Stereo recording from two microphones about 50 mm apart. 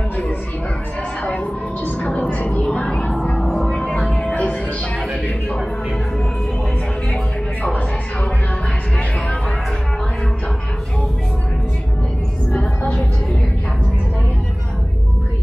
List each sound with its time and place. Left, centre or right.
1.2 s music: left
2.2 s music: left
2.6 s music: left
7.6 s music: left